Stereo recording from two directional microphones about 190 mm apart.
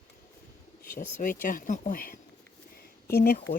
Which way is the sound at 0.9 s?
45° left (ahead or behind).